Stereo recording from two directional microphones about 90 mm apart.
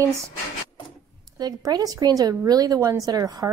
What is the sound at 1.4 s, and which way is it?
A woman's voice, 50° right (ahead or behind).